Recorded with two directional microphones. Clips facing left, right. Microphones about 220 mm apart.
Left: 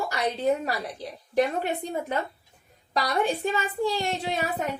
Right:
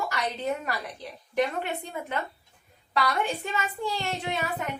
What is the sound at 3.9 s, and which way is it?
Speech, 35° left (ahead or behind).